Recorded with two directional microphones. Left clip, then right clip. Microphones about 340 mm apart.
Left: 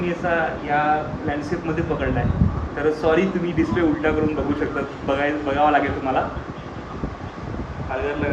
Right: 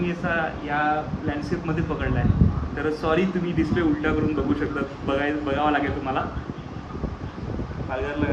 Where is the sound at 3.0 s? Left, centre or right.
Centre.